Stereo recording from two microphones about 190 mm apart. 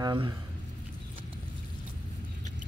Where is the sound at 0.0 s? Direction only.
20° right (ahead or behind).